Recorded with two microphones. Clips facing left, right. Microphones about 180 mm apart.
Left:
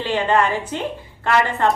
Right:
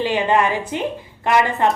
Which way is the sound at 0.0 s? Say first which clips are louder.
Right 1 dB; 15° right (ahead or behind).